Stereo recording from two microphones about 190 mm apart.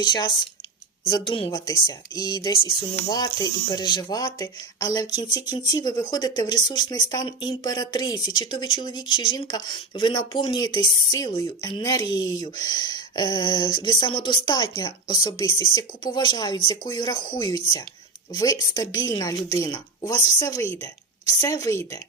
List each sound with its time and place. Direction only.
0.0 s speech: 25° left (ahead or behind)